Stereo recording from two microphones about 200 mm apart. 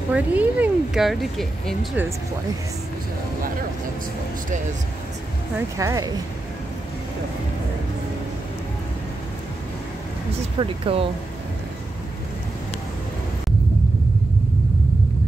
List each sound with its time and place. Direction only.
0.1 s speech: 10° right (ahead or behind)
5.8 s speech: 15° right (ahead or behind)
10.6 s speech: 30° right (ahead or behind)